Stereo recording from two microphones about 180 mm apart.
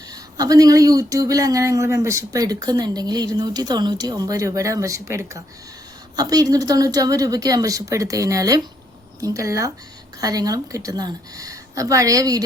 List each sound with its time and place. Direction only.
0.1 s speech: 20° right (ahead or behind)